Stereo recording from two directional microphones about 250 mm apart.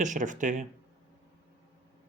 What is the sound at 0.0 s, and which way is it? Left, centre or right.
Speech, right.